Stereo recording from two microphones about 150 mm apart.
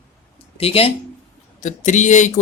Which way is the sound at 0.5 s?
40° left (ahead or behind).